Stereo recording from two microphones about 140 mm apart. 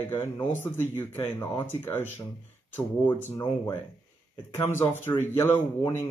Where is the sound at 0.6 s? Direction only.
15° left (ahead or behind).